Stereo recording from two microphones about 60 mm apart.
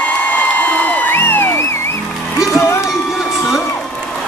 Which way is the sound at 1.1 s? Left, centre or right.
Left.